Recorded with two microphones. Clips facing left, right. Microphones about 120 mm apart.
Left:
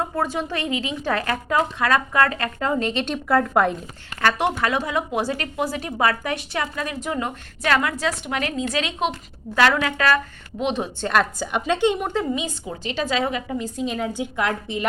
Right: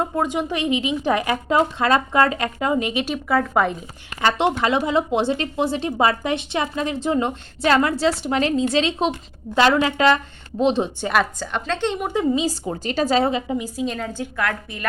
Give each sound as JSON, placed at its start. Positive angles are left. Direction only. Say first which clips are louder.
{"t": 0.2, "sound": "speech", "louder": "right 2 dB", "side_deg": -15}
{"t": 4.2, "sound": "a woman's voice", "louder": "right 2 dB", "side_deg": -20}
{"t": 11.0, "sound": "a woman's voice", "louder": "left 1 dB", "side_deg": -5}
{"t": 11.3, "sound": "a woman's voice", "louder": "left 3 dB", "side_deg": 10}
{"t": 12.3, "sound": "a woman's voice", "louder": "right 5 dB", "side_deg": -30}
{"t": 12.6, "sound": "a woman's voice", "louder": "right 4 dB", "side_deg": -40}
{"t": 13.7, "sound": "a woman's voice", "louder": "even", "side_deg": 5}